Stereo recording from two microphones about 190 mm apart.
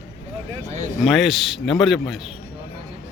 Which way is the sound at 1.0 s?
Centre (ahead or behind).